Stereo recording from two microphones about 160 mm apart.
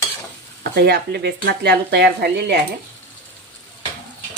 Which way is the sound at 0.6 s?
90° right.